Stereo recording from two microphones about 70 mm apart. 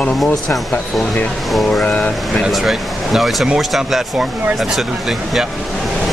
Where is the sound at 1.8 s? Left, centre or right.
Centre.